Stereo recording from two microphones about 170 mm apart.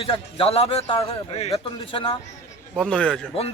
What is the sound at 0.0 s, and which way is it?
Speech, 35° left (ahead or behind).